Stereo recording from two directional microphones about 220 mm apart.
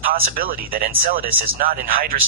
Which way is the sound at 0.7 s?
40° right (ahead or behind).